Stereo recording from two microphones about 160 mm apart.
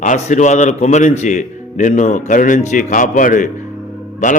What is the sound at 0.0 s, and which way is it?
A man's voice, 50° left (ahead or behind).